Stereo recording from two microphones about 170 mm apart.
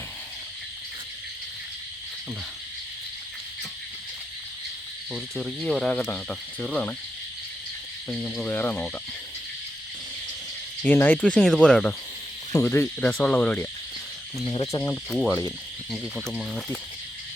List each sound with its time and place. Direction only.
5.1 s speech: centre (ahead or behind)
8.1 s speech: 5° left (ahead or behind)
10.8 s speech: 10° left (ahead or behind)
14.4 s speech: 25° left (ahead or behind)
16.1 s speech: centre (ahead or behind)